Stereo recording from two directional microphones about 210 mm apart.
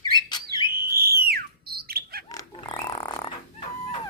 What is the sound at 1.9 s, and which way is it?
Bird, 45° right (ahead or behind).